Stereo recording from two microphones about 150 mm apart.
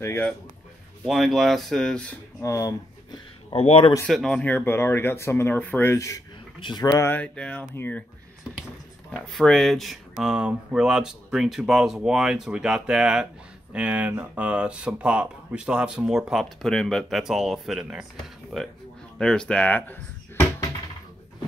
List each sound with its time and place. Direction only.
0.0 s speech: 15° left (ahead or behind)
1.0 s speech: centre (ahead or behind)
2.4 s speech: 20° left (ahead or behind)
3.4 s speech: 40° left (ahead or behind)
4.0 s speech: 5° left (ahead or behind); by 6.9 s 30° left (ahead or behind)
7.0 s speech: 10° left (ahead or behind)
9.1 s speech: centre (ahead or behind)